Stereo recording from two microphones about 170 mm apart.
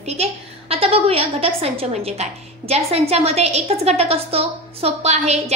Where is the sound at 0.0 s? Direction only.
40° right (ahead or behind).